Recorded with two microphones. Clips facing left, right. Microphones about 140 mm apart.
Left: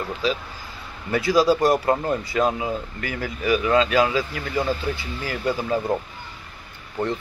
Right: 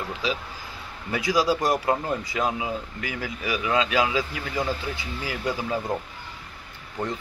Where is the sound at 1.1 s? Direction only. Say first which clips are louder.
Left 5 dB; 15° right (ahead or behind).